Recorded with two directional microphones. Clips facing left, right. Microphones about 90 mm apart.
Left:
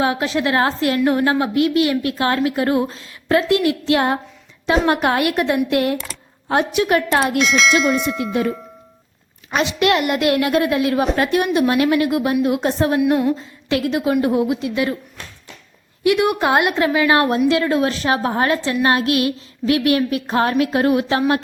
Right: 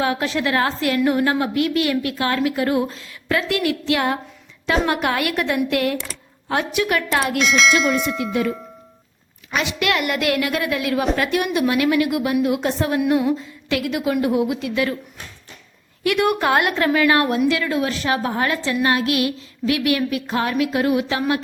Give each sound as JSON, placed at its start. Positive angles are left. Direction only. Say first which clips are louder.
{"t": 0.0, "sound": "a woman's voice", "louder": "left 2 dB", "side_deg": 20}
{"t": 7.3, "sound": "speech", "louder": "left 1 dB", "side_deg": 0}
{"t": 8.2, "sound": "a woman's voice", "louder": "left 1 dB", "side_deg": 30}
{"t": 16.0, "sound": "a woman's voice", "louder": "left 2 dB", "side_deg": 20}